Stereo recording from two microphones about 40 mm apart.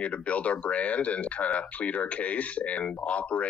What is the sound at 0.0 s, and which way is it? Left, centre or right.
Speech, left.